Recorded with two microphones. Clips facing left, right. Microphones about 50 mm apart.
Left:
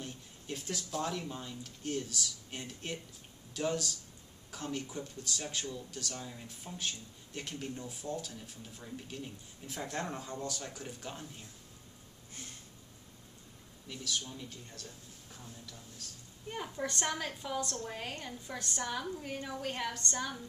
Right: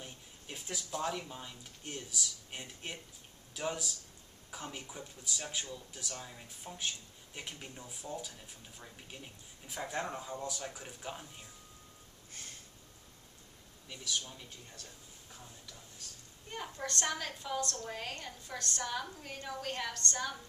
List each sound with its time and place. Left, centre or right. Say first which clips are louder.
0.0 s speech: left 4 dB; centre
16.4 s a woman's voice: left 3 dB; centre